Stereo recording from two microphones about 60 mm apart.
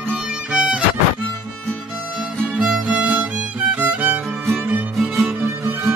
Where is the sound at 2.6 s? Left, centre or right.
Centre.